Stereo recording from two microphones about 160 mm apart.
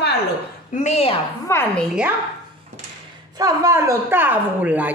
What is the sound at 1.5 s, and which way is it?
Speech, 15° left (ahead or behind).